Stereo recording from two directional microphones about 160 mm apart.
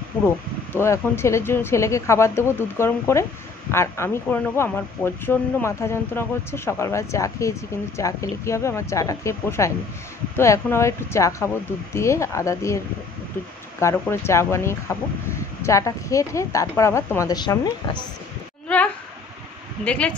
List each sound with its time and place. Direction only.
0.7 s speech: 15° left (ahead or behind)
19.8 s speech: 5° left (ahead or behind)